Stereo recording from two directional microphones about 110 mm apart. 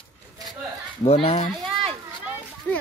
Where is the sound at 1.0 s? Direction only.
65° left (ahead or behind).